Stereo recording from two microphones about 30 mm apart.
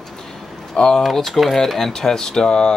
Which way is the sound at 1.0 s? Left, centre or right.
Centre.